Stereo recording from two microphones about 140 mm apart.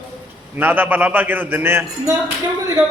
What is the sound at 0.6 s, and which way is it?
A man's voice, 15° right (ahead or behind).